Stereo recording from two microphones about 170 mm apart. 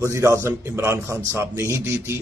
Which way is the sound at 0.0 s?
15° right (ahead or behind).